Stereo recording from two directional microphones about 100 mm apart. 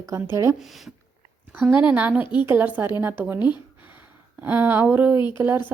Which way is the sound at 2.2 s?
50° left (ahead or behind).